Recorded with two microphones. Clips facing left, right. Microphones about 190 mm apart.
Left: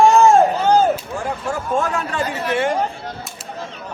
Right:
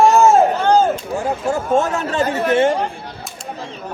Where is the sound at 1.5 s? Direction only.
25° right (ahead or behind).